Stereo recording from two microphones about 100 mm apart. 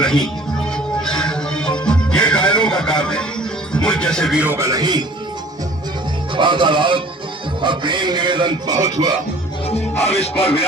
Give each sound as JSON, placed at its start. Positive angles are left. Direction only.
{"t": 0.0, "sound": "speech", "side_deg": 5}
{"t": 1.0, "sound": "music", "side_deg": 5}
{"t": 3.7, "sound": "speech", "side_deg": 10}
{"t": 4.5, "sound": "a man's voice", "side_deg": -30}
{"t": 4.8, "sound": "speech", "side_deg": -45}
{"t": 6.3, "sound": "music", "side_deg": -55}
{"t": 7.6, "sound": "speech", "side_deg": -50}
{"t": 10.0, "sound": "speech", "side_deg": 90}